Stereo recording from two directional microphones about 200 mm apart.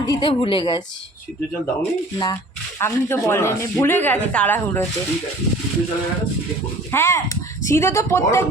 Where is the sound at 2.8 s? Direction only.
10° left (ahead or behind).